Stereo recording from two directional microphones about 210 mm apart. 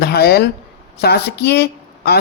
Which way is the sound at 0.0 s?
50° left (ahead or behind).